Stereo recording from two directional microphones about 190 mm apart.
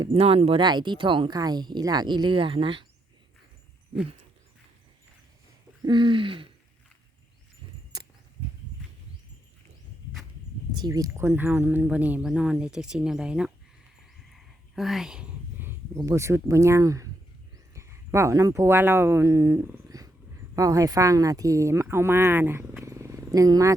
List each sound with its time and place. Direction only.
0.0 s speech: 30° right (ahead or behind)
5.8 s speech: 25° right (ahead or behind)
10.8 s speech: 20° right (ahead or behind); by 13.5 s 5° right (ahead or behind)
14.3 s a sound: centre (ahead or behind); by 17.1 s 15° right (ahead or behind)
17.7 s speech: 15° right (ahead or behind)